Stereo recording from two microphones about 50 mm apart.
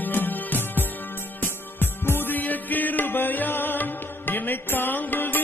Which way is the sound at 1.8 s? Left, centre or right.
Left.